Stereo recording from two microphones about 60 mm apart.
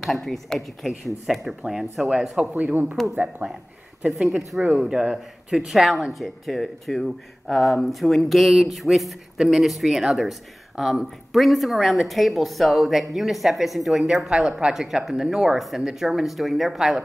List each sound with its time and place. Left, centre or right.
0.0 s speech: centre
1.2 s speech: centre
2.4 s speech: right
4.1 s speech: centre